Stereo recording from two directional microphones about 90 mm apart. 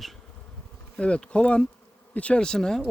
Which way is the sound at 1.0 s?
10° left (ahead or behind).